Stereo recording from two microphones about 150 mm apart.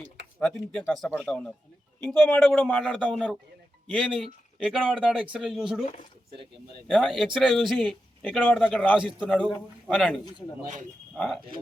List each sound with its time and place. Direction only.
0.3 s speech: 5° left (ahead or behind)
5.1 s speech: 5° right (ahead or behind)
6.8 s speech: centre (ahead or behind)